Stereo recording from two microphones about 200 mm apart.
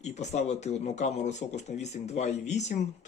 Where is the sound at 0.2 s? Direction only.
35° left (ahead or behind).